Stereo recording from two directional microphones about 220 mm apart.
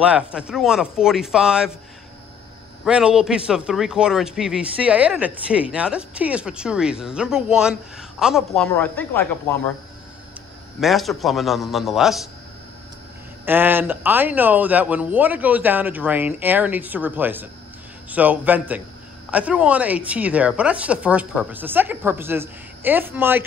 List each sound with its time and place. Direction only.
0.0 s a man's voice: 5° right (ahead or behind)
2.8 s a man's voice: 5° right (ahead or behind)
8.7 s speech: 10° left (ahead or behind)
10.8 s a man's voice: centre (ahead or behind)
13.5 s a woman's voice: 10° right (ahead or behind)